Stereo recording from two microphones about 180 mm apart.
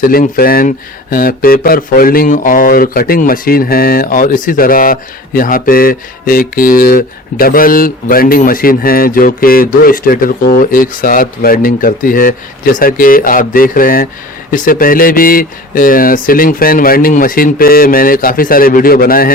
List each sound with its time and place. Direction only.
0.0 s speech: 50° left (ahead or behind)